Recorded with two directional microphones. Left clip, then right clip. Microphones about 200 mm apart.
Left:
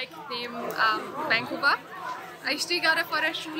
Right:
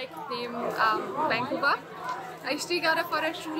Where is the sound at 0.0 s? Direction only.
5° right (ahead or behind).